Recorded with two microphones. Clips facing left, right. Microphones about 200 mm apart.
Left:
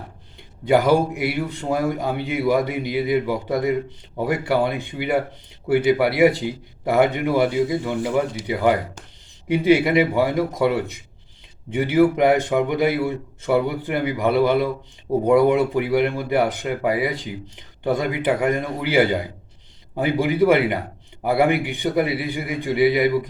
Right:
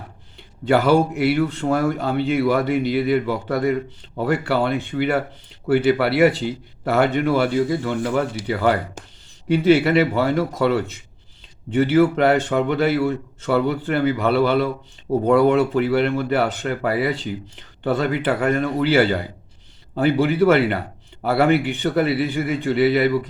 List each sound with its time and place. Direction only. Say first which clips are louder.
0.3 s speech: even; 15° left (ahead or behind)